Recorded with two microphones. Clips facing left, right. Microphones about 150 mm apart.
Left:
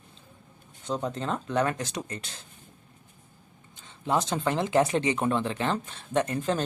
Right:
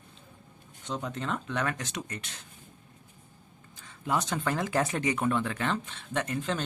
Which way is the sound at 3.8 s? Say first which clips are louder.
Left 3 dB; 25° left (ahead or behind).